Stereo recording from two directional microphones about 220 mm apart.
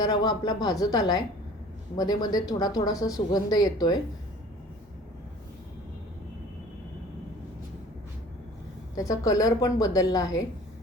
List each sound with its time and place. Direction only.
0.0 s speech: 20° left (ahead or behind)
9.0 s speech: 15° left (ahead or behind)